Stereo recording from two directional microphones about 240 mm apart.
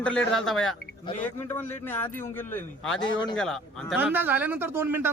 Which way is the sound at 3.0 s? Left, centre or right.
Centre.